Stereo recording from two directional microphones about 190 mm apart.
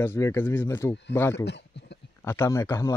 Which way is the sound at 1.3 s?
65° left (ahead or behind).